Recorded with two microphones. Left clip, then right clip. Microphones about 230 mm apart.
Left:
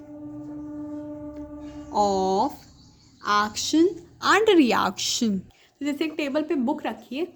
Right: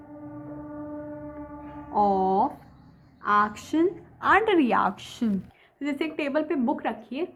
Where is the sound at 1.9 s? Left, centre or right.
Left.